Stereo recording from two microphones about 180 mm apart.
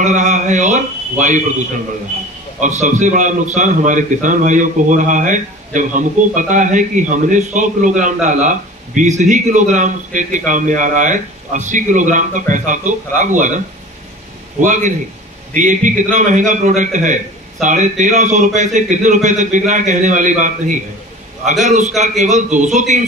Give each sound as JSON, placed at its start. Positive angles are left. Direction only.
{"t": 0.0, "sound": "a man's voice", "side_deg": -45}
{"t": 14.6, "sound": "a man's voice", "side_deg": -45}